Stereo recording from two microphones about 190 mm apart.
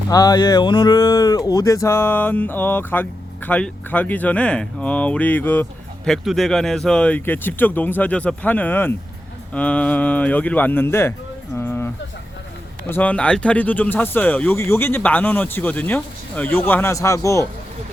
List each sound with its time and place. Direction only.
0.1 s speech: 20° left (ahead or behind)
11.5 s a sound: 10° left (ahead or behind)
12.9 s speech: 10° left (ahead or behind)